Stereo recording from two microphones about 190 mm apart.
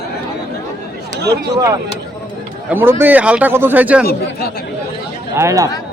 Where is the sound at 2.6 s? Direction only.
10° right (ahead or behind).